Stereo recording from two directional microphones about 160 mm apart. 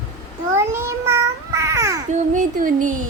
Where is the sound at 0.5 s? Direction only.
15° right (ahead or behind).